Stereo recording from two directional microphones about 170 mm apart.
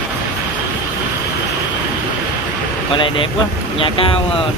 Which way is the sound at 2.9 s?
30° left (ahead or behind).